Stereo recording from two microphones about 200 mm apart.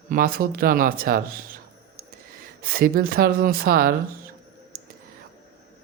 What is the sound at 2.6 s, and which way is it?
Speech, 45° right (ahead or behind).